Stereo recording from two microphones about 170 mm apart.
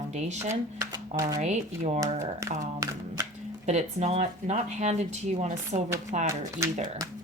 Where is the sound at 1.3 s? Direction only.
45° right (ahead or behind).